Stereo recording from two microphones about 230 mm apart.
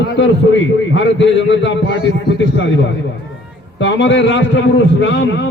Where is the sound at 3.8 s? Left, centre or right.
Left.